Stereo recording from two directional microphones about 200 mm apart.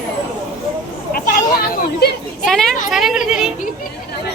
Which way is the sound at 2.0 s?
55° left (ahead or behind).